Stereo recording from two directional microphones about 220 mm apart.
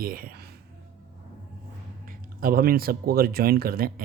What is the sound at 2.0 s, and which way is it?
Speech, 40° right (ahead or behind).